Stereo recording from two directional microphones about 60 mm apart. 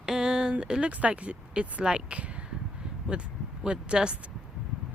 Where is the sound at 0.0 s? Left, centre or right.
Centre.